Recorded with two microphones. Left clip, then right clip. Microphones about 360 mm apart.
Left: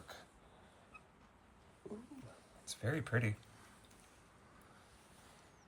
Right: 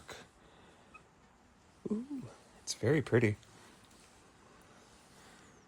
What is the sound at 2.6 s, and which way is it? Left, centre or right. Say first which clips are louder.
Speech: right 10 dB; centre.